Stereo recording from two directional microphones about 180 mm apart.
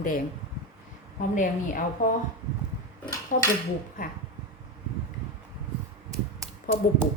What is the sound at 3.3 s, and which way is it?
Speech, 50° left (ahead or behind).